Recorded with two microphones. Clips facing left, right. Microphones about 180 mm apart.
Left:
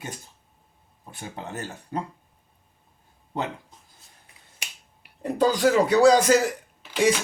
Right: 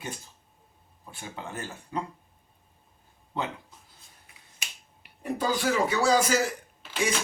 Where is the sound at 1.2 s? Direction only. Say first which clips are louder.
Left 3 dB; 40° left (ahead or behind).